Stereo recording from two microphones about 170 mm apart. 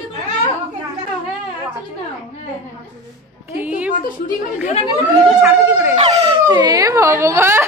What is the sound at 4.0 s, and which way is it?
Speech, 50° left (ahead or behind).